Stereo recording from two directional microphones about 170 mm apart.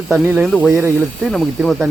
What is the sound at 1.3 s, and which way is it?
Speech, centre (ahead or behind).